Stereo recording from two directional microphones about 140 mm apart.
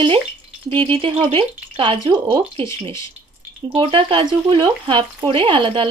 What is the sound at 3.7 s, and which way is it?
Speech, 40° right (ahead or behind).